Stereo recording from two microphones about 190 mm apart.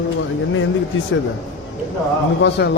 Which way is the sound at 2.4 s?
65° left (ahead or behind).